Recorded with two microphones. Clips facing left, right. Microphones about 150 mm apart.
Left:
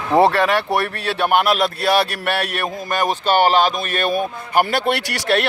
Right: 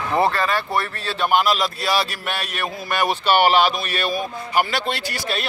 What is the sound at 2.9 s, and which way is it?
Speech, 45° left (ahead or behind).